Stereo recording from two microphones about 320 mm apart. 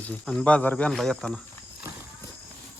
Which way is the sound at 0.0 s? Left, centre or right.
Centre.